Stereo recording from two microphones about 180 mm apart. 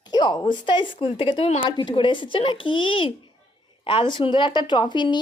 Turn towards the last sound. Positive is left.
turn(degrees=25)  # may be behind; listen again after turning